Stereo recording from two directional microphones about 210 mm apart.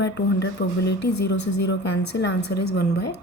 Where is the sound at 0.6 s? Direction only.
50° left (ahead or behind).